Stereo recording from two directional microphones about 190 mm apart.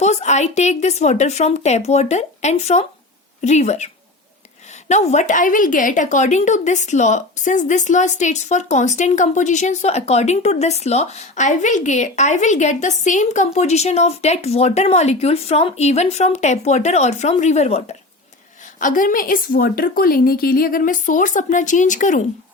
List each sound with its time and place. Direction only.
0.0 s a woman's voice: 35° left (ahead or behind)
4.9 s a woman's voice: 40° left (ahead or behind)
18.8 s a woman's voice: 45° left (ahead or behind)